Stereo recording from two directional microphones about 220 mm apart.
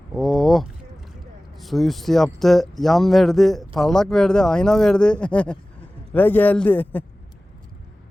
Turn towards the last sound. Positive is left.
turn(degrees=10)  # may be behind; listen again after turning